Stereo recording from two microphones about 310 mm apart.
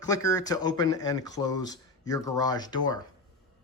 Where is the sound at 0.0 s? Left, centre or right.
Centre.